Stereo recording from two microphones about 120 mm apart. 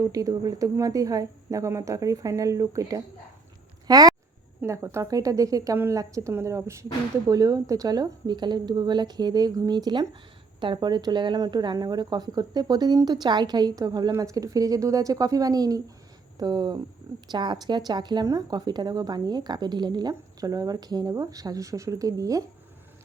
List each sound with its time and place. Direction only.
0.0 s a woman's voice: 30° right (ahead or behind)
4.6 s a woman's voice: 20° right (ahead or behind)